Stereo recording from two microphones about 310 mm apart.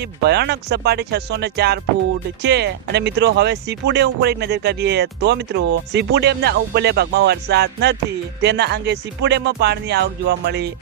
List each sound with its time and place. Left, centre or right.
0.0 s speech: right